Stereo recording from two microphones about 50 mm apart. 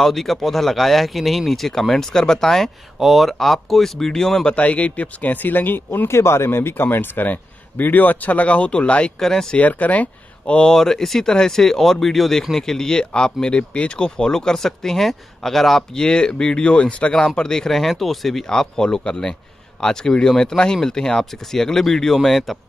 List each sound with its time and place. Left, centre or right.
0.0 s speech: centre
4.6 s speech: left
6.0 s speech: left
9.2 s speech: centre
9.6 s speech: left
10.7 s speech: centre
16.0 s speech: centre
17.4 s speech: centre